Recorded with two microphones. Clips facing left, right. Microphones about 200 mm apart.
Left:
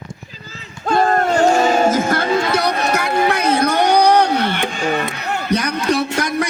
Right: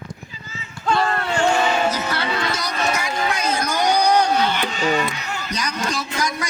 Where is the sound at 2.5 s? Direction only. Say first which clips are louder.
Left 6 dB; 60° left (ahead or behind).